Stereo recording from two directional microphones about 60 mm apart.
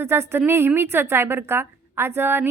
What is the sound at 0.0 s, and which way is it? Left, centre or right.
A woman's voice, right.